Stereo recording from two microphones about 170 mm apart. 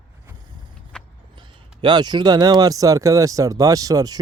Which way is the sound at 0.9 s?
5° left (ahead or behind).